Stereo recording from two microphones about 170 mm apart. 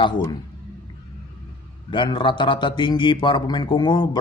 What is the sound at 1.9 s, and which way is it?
Speech, 30° left (ahead or behind).